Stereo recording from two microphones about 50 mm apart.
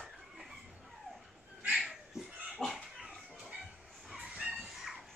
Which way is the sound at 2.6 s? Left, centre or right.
Centre.